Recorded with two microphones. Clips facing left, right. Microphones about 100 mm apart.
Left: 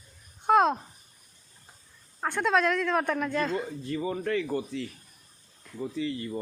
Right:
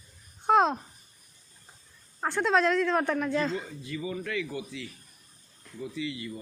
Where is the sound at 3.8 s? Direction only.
40° left (ahead or behind).